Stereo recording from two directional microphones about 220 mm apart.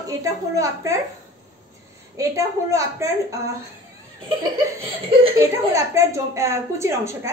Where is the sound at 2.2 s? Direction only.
15° right (ahead or behind).